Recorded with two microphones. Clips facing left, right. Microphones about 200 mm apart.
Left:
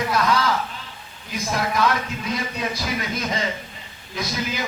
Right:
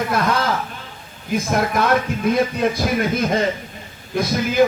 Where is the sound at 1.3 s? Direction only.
55° right (ahead or behind).